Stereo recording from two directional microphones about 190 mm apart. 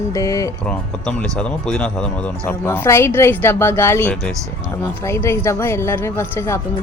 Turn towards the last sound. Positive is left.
turn(degrees=15)  # may be behind; listen again after turning